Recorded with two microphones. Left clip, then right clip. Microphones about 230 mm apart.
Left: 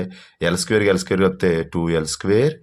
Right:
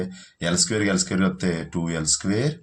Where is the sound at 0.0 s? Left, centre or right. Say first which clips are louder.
Left 6 dB; left.